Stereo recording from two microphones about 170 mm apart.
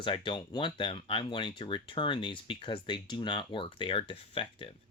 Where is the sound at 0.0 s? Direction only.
30° left (ahead or behind).